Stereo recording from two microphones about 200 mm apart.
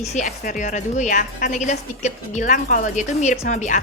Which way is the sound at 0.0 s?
35° left (ahead or behind).